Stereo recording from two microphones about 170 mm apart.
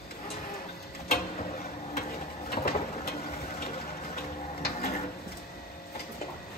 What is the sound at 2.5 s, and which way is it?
Train, 65° left (ahead or behind).